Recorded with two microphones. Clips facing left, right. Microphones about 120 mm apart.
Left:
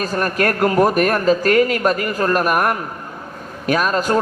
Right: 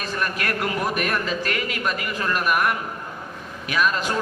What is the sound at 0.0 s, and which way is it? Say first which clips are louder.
A woman's voice: left 8 dB; 45° left (ahead or behind).